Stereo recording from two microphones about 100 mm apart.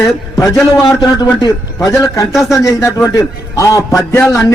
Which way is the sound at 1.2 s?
45° left (ahead or behind).